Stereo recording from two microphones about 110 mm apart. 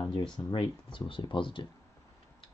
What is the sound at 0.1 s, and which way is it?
Speech, 45° left (ahead or behind).